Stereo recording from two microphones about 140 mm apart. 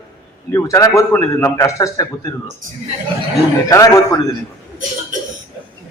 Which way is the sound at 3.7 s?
25° left (ahead or behind).